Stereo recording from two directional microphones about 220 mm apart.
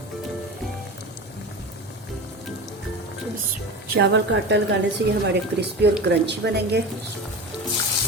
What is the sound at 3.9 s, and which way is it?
Speech, 50° right (ahead or behind).